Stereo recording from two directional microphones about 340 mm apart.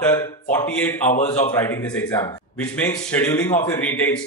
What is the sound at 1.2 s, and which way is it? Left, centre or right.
Speech, centre.